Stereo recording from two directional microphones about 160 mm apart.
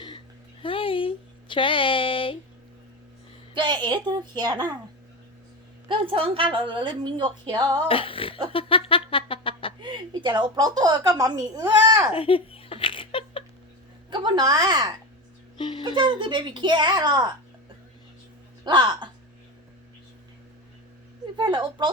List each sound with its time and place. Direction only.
0.6 s a sound: 35° left (ahead or behind)
3.5 s a woman's voice: 30° right (ahead or behind)
5.9 s a woman's voice: 35° right (ahead or behind)
7.9 s music: 35° left (ahead or behind)
8.5 s a sound: 35° left (ahead or behind)
9.8 s a woman's voice: 30° right (ahead or behind)
12.1 s laughter: 35° left (ahead or behind)
14.1 s a woman's voice: 30° right (ahead or behind)
15.5 s speech: 30° left (ahead or behind)
16.0 s a woman's voice: 30° right (ahead or behind)
18.6 s a woman's voice: 30° right (ahead or behind)
21.3 s a woman's voice: 30° right (ahead or behind)